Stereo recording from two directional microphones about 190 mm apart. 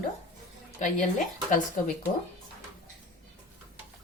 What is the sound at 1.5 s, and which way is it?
Speech, 45° left (ahead or behind).